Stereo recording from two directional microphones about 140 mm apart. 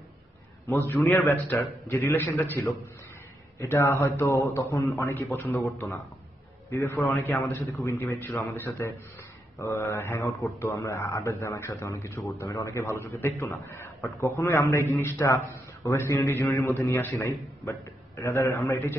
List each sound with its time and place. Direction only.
0.7 s a man's voice: 15° left (ahead or behind)
6.7 s a man's voice: 20° left (ahead or behind)